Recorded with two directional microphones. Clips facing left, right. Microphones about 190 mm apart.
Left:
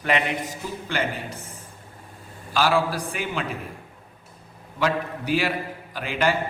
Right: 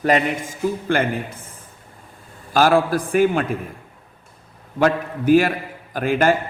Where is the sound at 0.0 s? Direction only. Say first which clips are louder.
Right 6 dB; 45° right (ahead or behind).